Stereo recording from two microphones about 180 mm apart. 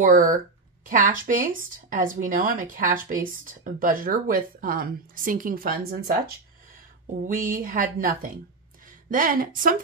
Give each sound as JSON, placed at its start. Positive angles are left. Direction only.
{"t": 0.0, "sound": "speech", "side_deg": -50}